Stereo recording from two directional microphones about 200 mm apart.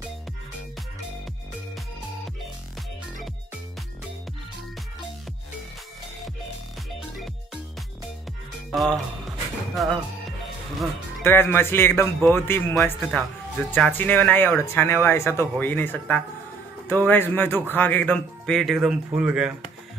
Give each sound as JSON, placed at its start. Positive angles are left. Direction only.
{"t": 8.7, "sound": "speech", "side_deg": 0}
{"t": 11.2, "sound": "speech", "side_deg": 10}